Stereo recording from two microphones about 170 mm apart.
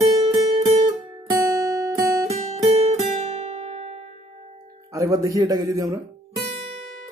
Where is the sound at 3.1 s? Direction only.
40° right (ahead or behind).